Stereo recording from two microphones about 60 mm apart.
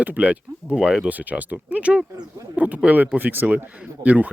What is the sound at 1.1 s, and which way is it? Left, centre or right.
Speech, right.